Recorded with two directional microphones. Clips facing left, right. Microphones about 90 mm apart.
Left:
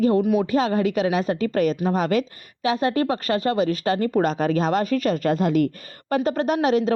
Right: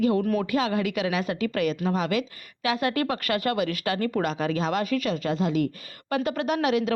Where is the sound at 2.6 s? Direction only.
30° left (ahead or behind).